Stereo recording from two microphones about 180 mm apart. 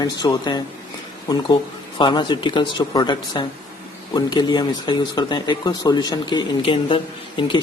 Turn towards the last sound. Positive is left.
turn(degrees=25)  # may be behind; listen again after turning